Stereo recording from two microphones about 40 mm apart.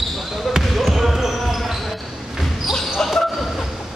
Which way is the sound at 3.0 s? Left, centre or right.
Centre.